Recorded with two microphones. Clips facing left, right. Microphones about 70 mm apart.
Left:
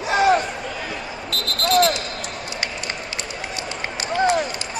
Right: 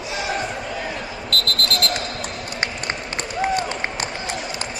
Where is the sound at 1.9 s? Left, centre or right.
Right.